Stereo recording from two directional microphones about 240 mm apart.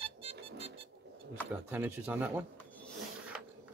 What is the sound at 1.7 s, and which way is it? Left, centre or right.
Speech, centre.